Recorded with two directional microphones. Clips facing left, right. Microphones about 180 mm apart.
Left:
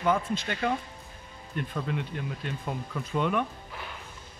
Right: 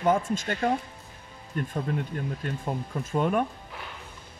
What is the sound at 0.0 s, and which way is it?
Speech, 45° right (ahead or behind).